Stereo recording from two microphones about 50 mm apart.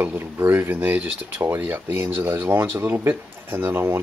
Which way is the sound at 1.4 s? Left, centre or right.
Right.